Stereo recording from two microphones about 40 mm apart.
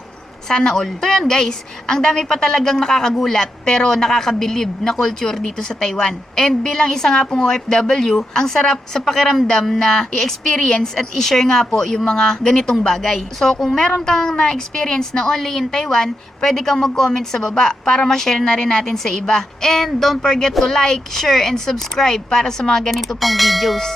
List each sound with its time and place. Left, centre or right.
0.4 s a woman's voice: centre